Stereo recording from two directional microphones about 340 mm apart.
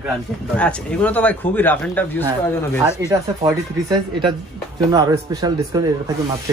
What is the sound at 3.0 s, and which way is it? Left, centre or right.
Speech, centre.